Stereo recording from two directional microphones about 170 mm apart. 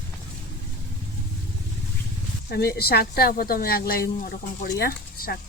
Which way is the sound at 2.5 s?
65° left (ahead or behind).